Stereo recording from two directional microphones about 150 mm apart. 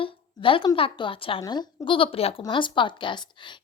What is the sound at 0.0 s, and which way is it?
A woman's voice, 35° left (ahead or behind).